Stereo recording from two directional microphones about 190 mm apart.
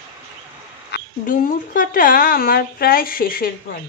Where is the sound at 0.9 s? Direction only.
60° left (ahead or behind).